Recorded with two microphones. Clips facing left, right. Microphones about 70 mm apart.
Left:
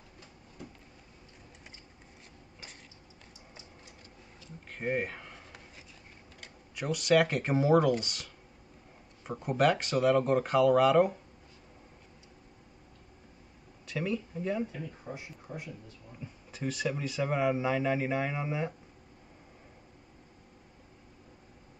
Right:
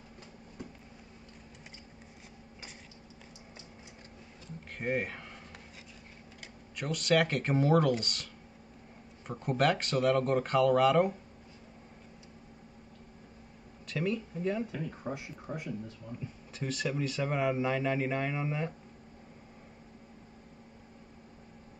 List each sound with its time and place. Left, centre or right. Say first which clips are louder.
4.7 s a sound: left 1 dB; centre
6.4 s speech: left 2 dB; centre
9.3 s speech: left 2 dB; centre
13.8 s speech: even; centre
15.1 s speech: right 5 dB; right
15.5 s speech: right 3 dB; right
16.2 s speech: left 3 dB; centre